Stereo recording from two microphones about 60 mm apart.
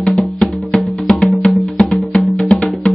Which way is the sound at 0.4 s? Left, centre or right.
Centre.